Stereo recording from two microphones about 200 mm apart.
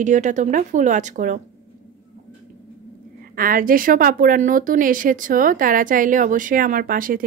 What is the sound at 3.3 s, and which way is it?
A woman's voice, 45° right (ahead or behind).